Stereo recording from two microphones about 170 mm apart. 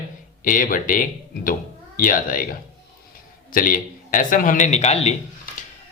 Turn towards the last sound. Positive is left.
turn(degrees=40)  # may be behind; listen again after turning